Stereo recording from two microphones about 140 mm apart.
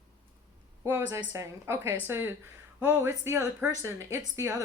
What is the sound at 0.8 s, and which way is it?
A woman's voice, 20° right (ahead or behind).